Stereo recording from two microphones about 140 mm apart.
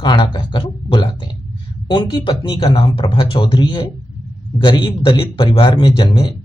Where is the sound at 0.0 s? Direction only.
35° left (ahead or behind).